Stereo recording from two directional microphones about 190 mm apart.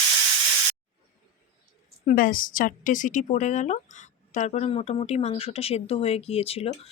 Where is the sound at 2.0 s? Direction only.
45° left (ahead or behind).